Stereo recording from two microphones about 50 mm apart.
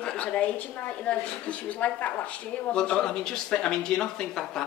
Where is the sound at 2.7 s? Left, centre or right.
Centre.